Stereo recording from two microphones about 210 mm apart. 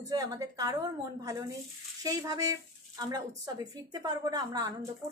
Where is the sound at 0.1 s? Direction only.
15° right (ahead or behind).